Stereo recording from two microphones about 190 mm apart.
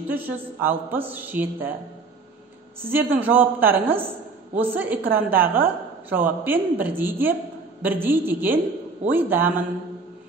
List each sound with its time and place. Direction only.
0.1 s a woman's voice: 10° right (ahead or behind)
2.8 s a woman's voice: 10° right (ahead or behind)